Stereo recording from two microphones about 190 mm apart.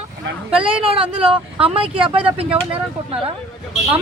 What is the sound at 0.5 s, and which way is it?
Speech, 30° right (ahead or behind).